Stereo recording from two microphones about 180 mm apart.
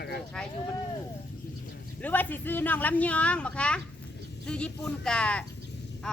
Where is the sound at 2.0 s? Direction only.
10° left (ahead or behind).